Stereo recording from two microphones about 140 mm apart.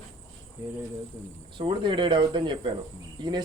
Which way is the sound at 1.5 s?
35° right (ahead or behind).